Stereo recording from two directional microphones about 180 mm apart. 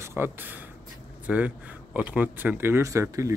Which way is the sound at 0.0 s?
15° right (ahead or behind).